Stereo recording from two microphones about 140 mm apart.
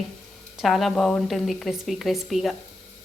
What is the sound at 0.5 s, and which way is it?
Stir, centre (ahead or behind).